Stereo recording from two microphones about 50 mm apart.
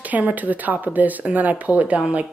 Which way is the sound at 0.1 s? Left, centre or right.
Right.